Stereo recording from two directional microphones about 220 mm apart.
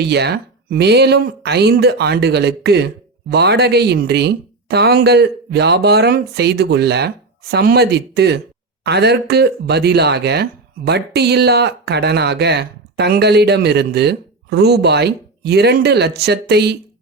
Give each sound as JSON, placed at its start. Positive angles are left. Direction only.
{"t": 0.0, "sound": "speech", "side_deg": -50}